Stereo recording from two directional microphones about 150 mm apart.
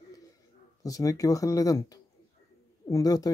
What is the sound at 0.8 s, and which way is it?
A man's voice, 25° left (ahead or behind).